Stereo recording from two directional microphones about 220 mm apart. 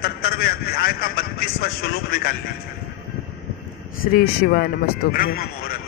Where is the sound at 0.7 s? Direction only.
40° left (ahead or behind).